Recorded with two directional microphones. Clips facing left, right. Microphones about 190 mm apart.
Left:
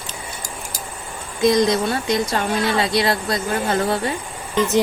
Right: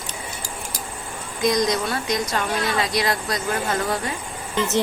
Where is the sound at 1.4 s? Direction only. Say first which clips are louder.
Left 4 dB; 30° left (ahead or behind).